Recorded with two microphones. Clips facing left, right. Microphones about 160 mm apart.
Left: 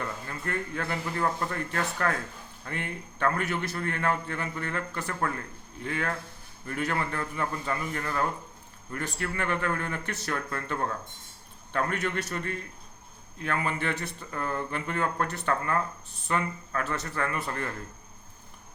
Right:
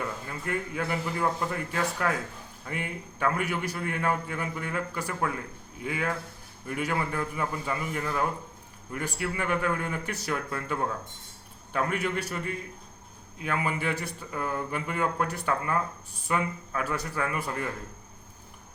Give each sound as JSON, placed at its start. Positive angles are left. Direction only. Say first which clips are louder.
{"t": 0.0, "sound": "speech", "louder": "right 1 dB", "side_deg": -10}